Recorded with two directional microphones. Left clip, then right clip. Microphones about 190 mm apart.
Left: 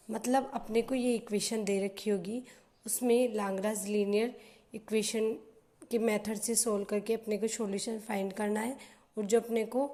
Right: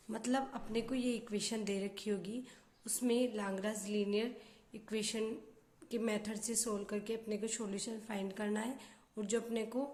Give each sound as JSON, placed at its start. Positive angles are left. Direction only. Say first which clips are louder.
{"t": 0.1, "sound": "a woman's voice", "louder": "left 7 dB", "side_deg": 20}